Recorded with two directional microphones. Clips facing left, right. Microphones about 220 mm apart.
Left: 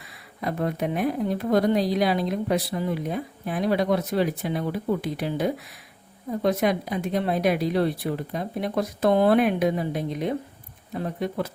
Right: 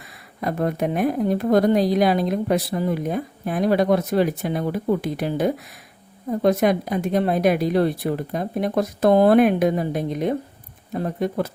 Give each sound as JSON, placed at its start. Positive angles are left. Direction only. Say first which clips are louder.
{"t": 0.4, "sound": "speech", "louder": "right 4 dB", "side_deg": -50}